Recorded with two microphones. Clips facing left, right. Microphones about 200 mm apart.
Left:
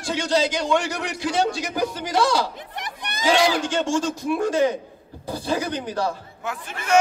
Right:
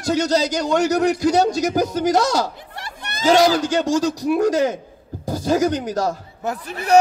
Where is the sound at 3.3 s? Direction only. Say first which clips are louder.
Right 5 dB; 40° right (ahead or behind).